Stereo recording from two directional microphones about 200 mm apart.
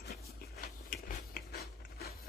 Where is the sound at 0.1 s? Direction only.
45° left (ahead or behind).